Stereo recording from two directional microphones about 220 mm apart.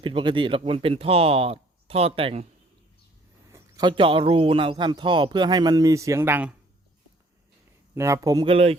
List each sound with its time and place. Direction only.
0.0 s a man's voice: 25° right (ahead or behind)
3.5 s a man's voice: 20° right (ahead or behind)
7.9 s speech: 15° right (ahead or behind)